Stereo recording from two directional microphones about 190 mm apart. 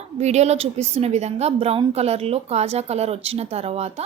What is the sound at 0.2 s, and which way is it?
A woman's voice, 35° right (ahead or behind).